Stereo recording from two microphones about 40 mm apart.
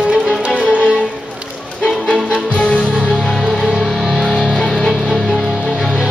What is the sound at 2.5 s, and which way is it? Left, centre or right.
Music, left.